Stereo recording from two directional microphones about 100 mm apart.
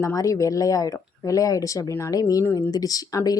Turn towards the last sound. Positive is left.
turn(degrees=40)  # may be behind; listen again after turning